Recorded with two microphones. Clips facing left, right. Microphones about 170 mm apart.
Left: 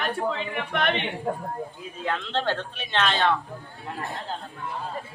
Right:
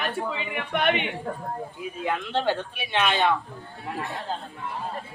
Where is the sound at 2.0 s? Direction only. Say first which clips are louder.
Right 1 dB; 10° right (ahead or behind).